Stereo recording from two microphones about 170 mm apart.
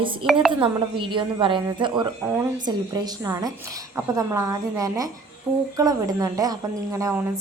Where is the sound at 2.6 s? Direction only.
25° right (ahead or behind).